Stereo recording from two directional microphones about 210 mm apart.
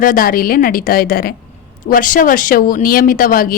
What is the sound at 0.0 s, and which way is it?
A woman's voice, 40° left (ahead or behind).